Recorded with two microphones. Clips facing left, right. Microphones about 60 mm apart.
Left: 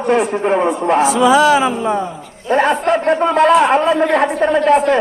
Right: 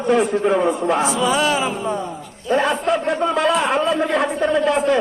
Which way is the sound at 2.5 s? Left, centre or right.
Left.